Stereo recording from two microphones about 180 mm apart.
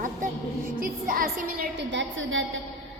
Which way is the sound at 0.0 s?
50° right (ahead or behind).